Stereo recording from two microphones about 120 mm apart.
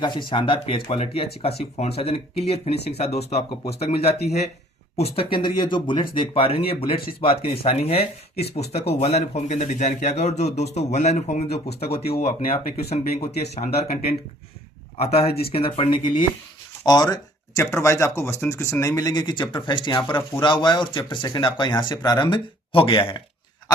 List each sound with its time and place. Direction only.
0.0 s speech: 40° left (ahead or behind)
16.8 s speech: 35° left (ahead or behind)